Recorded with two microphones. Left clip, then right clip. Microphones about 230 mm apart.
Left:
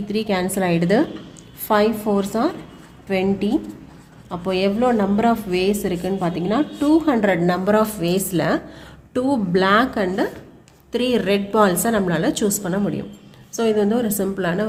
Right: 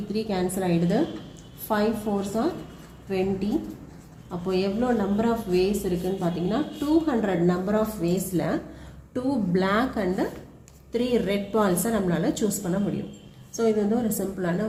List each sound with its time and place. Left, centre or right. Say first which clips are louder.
0.1 s a woman's voice: left 6 dB; left